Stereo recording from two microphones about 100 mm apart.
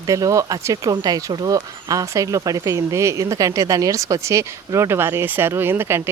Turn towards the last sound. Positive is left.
turn(degrees=-25)  # may be behind; listen again after turning